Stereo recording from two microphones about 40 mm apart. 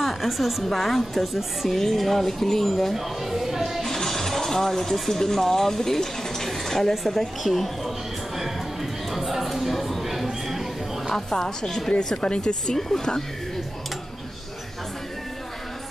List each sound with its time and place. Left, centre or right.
0.0 s a woman's voice: centre
3.8 s speech: centre
9.1 s a sound: centre
11.1 s a woman's voice: centre
12.7 s a woman's voice: centre